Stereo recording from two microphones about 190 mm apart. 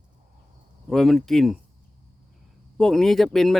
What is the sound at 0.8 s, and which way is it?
Speech, centre (ahead or behind).